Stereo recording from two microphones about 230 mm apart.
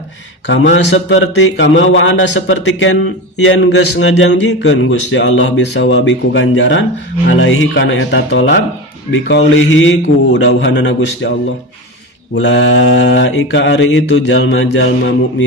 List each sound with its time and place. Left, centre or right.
0.4 s a man's voice: left
12.3 s a man's voice: left